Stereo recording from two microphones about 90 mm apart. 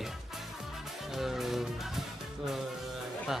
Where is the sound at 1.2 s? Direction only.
5° right (ahead or behind).